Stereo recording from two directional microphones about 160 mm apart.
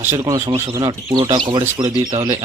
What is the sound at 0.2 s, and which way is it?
Speech, 20° right (ahead or behind).